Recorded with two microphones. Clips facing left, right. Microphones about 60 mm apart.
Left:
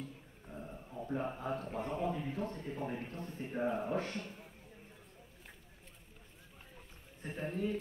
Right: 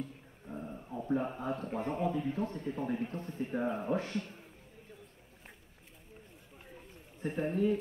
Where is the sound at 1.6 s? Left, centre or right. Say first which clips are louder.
Right 3 dB; right.